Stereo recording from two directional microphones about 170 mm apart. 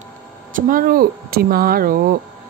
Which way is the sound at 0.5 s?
55° right (ahead or behind).